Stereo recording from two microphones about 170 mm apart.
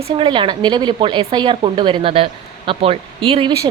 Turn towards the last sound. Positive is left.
turn(degrees=-30)  # may be behind; listen again after turning